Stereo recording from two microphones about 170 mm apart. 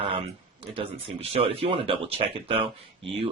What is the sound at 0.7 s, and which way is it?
Speech, 35° right (ahead or behind).